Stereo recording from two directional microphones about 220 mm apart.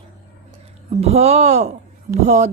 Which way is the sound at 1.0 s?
30° right (ahead or behind).